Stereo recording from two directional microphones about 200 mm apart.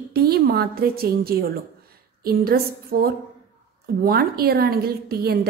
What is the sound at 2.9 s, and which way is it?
A woman's voice, 45° right (ahead or behind).